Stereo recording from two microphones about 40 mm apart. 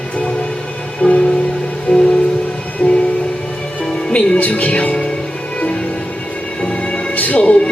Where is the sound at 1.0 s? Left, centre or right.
Left.